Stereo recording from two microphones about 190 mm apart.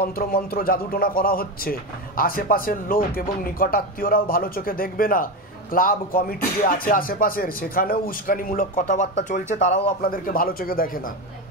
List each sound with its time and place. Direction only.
0.0 s a man's voice: 50° left (ahead or behind)